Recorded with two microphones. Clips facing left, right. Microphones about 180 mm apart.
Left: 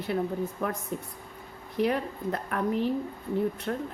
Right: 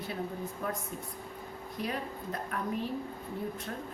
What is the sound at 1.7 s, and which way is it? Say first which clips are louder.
A woman's voice: left 9 dB; 70° left (ahead or behind).